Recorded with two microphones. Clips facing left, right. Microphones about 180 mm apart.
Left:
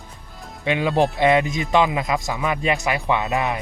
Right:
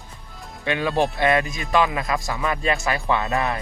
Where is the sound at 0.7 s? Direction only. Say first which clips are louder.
Left 2 dB; 20° left (ahead or behind).